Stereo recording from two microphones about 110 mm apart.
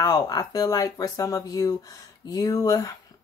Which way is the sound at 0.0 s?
35° left (ahead or behind).